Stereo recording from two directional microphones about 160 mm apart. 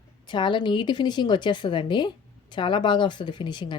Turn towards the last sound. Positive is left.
turn(degrees=30)  # may be behind; listen again after turning